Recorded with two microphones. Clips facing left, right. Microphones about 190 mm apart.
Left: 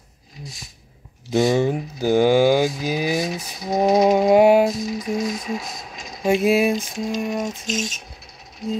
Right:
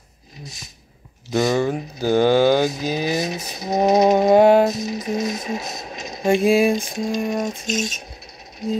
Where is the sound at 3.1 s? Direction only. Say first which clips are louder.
Even; 20° right (ahead or behind).